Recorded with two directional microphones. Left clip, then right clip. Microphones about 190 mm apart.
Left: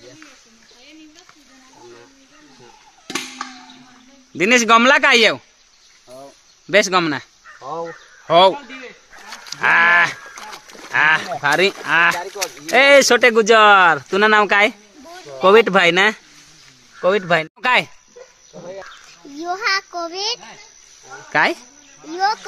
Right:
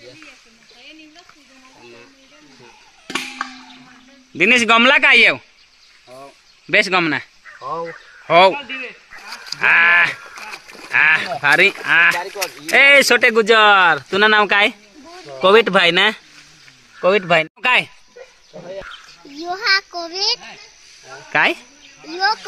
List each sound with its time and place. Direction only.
4.4 s a man's voice: centre (ahead or behind)
6.7 s a man's voice: centre (ahead or behind)
8.5 s a sound: 40° right (ahead or behind)
9.5 s livestock: 5° left (ahead or behind)
10.9 s a man's voice: 5° left (ahead or behind)
12.7 s a man's voice: 10° left (ahead or behind)
17.0 s a man's voice: 15° right (ahead or behind)
17.6 s speech: 10° left (ahead or behind)
19.4 s speech: 10° left (ahead or behind)
21.3 s a man's voice: centre (ahead or behind)